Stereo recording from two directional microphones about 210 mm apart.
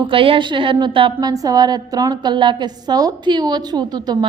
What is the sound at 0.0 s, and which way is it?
A woman's voice, 25° right (ahead or behind).